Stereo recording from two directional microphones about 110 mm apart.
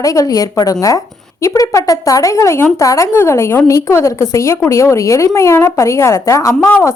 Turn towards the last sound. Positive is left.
turn(degrees=30)  # may be behind; listen again after turning